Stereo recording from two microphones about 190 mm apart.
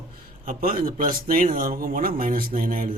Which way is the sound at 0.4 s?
50° right (ahead or behind).